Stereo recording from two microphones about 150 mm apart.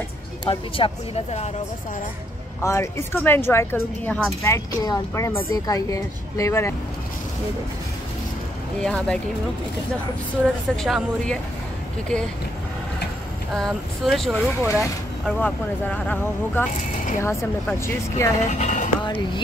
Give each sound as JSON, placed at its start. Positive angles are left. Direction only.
{"t": 0.5, "sound": "speech", "side_deg": 35}
{"t": 2.6, "sound": "a woman's voice", "side_deg": 20}
{"t": 8.8, "sound": "speech", "side_deg": 5}
{"t": 10.4, "sound": "speech", "side_deg": 0}
{"t": 13.6, "sound": "speech", "side_deg": 0}
{"t": 15.2, "sound": "a woman's voice", "side_deg": 10}
{"t": 18.5, "sound": "speech", "side_deg": 55}
{"t": 19.0, "sound": "speech", "side_deg": 30}